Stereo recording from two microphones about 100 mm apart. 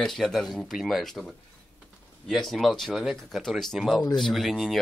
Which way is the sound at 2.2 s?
Centre (ahead or behind).